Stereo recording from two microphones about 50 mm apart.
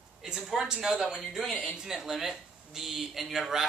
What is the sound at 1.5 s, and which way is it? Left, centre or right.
Speech, left.